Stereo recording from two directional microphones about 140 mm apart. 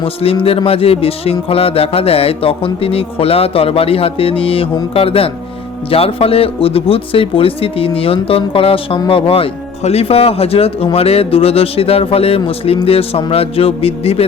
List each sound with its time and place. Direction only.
0.0 s speech: 40° left (ahead or behind)